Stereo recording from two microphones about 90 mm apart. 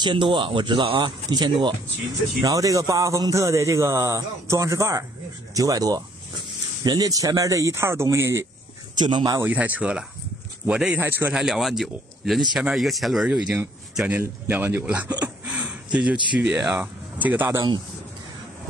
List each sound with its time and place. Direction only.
0.0 s speech: 65° right (ahead or behind); by 1.1 s 80° right
1.3 s speech: 55° right (ahead or behind)
2.4 s speech: 40° right (ahead or behind)
8.9 s speech: 55° right (ahead or behind)
9.4 s speech: 15° right (ahead or behind)
11.0 s speech: 25° right (ahead or behind)
11.3 s speech: 5° right (ahead or behind)
13.9 s speech: 15° right (ahead or behind)
15.4 s a sound: 15° right (ahead or behind)
16.3 s speech: 15° right (ahead or behind)